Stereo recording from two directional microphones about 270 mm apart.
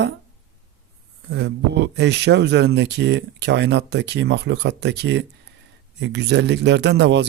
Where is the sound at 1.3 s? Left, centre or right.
Right.